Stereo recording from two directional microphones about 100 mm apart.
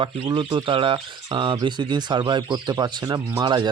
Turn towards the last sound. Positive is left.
turn(degrees=-45)  # may be behind; listen again after turning